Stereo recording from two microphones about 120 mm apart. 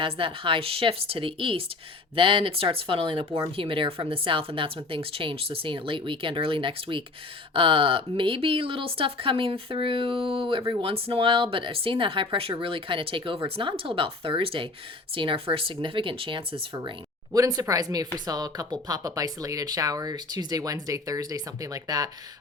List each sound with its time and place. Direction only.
0.0 s speech: 45° right (ahead or behind)
3.2 s speech: 30° right (ahead or behind)
3.5 s speech: 45° right (ahead or behind)
17.3 s speech: 25° right (ahead or behind)